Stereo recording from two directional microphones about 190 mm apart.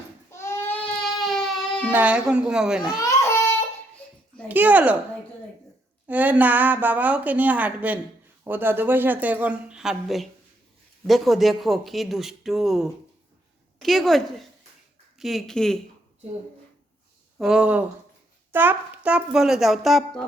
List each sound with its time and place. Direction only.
0.3 s goat: 15° left (ahead or behind)
1.0 s baby cry: centre (ahead or behind)
3.0 s baby cry: 15° left (ahead or behind)
4.4 s a woman's voice: 10° right (ahead or behind)
6.1 s a woman's voice: 10° right (ahead or behind)
17.3 s speech: 5° right (ahead or behind)